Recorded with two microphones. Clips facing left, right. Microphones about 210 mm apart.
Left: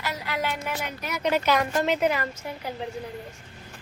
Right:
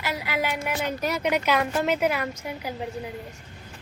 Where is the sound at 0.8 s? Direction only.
35° right (ahead or behind).